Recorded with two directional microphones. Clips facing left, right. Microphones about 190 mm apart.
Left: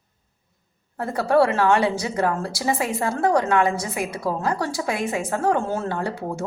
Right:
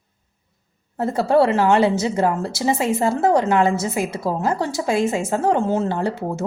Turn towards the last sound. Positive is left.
turn(degrees=-25)  # may be behind; listen again after turning